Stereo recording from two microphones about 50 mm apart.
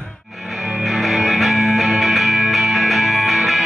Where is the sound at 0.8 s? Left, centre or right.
Centre.